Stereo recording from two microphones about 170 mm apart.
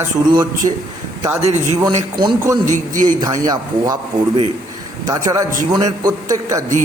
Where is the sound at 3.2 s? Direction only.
20° right (ahead or behind).